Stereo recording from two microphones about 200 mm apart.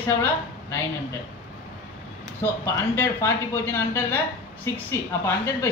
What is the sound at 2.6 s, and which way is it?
Speech, 15° left (ahead or behind).